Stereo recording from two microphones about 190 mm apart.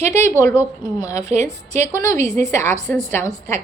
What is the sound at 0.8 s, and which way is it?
Speech, 25° left (ahead or behind).